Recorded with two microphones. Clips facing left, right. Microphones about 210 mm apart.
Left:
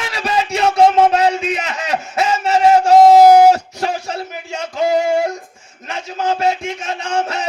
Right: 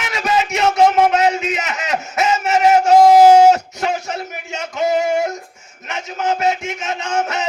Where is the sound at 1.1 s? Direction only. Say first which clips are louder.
Left 1 dB; 30° left (ahead or behind).